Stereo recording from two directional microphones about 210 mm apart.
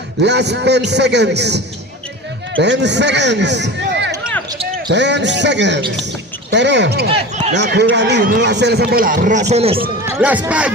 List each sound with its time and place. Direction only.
0.2 s a man's voice: 55° right (ahead or behind); by 9.8 s 30° right (ahead or behind)
10.1 s speech: 5° right (ahead or behind)